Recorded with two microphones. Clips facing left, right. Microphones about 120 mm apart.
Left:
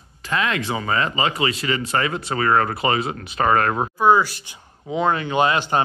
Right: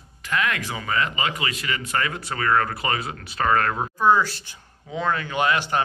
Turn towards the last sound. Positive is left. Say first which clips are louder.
# left 3 dB
turn(degrees=25)  # may be behind; listen again after turning